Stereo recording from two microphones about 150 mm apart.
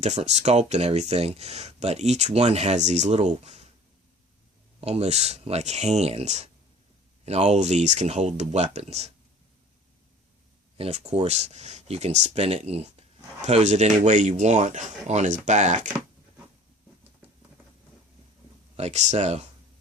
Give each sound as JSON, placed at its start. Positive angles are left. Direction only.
{"t": 0.0, "sound": "speech", "side_deg": -50}
{"t": 4.8, "sound": "speech", "side_deg": -45}
{"t": 10.8, "sound": "speech", "side_deg": -45}
{"t": 18.8, "sound": "speech", "side_deg": -50}